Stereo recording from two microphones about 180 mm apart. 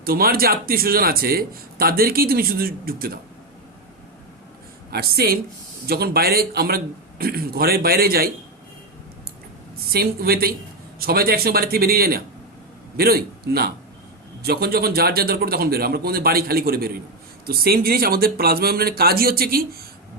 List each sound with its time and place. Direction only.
0.0 s speech: 55° right (ahead or behind)
4.9 s speech: 60° right (ahead or behind)
9.9 s speech: 60° right (ahead or behind)